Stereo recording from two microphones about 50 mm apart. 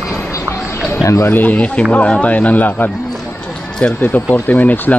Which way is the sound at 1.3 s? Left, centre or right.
Left.